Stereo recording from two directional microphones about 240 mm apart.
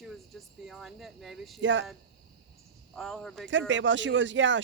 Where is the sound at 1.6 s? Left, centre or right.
Right.